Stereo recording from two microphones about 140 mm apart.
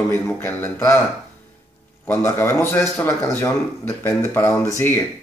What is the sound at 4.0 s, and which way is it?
Speech, 15° left (ahead or behind).